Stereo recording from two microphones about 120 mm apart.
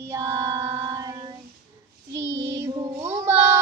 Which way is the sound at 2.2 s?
20° right (ahead or behind).